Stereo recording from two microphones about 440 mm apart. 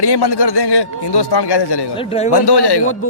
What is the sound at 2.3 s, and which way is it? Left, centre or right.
Speech, left.